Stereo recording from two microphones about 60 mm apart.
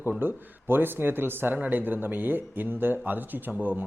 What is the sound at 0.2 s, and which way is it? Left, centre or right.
Speech, right.